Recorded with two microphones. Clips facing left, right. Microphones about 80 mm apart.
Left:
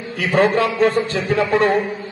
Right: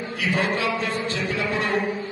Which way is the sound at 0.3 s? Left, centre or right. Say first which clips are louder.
Left 8 dB; left.